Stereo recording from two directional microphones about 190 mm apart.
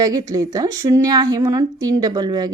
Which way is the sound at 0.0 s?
20° right (ahead or behind).